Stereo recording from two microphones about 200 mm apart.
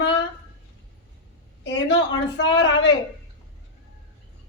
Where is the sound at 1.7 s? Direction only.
60° left (ahead or behind).